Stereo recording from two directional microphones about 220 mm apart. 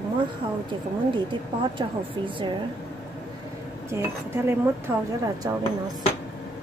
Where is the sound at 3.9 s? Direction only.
10° right (ahead or behind).